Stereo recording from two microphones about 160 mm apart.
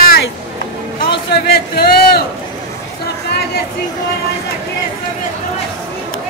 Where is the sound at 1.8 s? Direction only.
70° left (ahead or behind).